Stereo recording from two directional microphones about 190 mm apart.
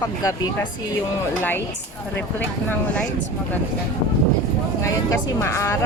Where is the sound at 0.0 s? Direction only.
20° left (ahead or behind).